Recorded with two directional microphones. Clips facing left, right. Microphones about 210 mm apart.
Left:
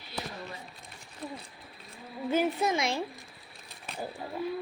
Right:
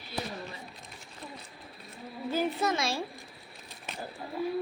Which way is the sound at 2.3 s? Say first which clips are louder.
Left 2 dB; 15° left (ahead or behind).